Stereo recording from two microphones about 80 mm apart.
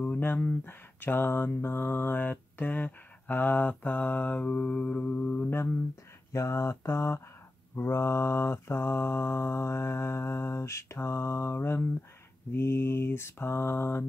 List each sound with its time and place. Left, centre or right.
0.2 s speech: left
4.3 s mantra: centre
5.5 s mantra: left